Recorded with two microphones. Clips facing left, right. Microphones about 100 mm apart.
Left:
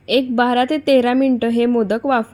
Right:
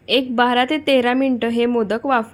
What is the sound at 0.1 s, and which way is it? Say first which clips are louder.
A woman's voice: left 1 dB; 20° left (ahead or behind).